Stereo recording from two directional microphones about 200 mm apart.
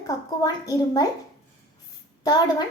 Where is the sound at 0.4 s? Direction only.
15° left (ahead or behind).